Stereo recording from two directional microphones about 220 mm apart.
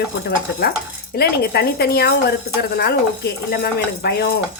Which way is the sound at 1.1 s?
45° left (ahead or behind).